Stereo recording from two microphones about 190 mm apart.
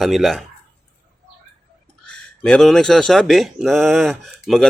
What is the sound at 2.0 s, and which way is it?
Speech, 5° left (ahead or behind).